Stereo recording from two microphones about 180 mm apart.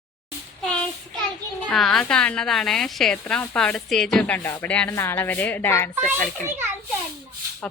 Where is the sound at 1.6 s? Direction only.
Centre (ahead or behind).